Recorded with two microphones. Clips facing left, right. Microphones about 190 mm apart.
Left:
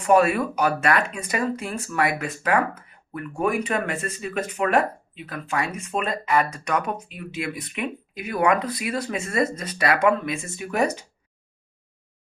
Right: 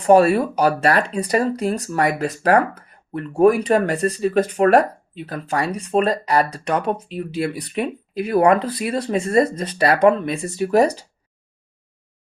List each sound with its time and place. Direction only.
0.0 s speech: 30° right (ahead or behind)